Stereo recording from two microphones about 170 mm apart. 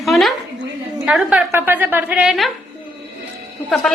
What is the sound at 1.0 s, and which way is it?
A child's voice, 5° right (ahead or behind).